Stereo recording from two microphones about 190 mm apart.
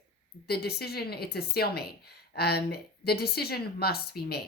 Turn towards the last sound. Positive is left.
turn(degrees=55)  # may be behind; listen again after turning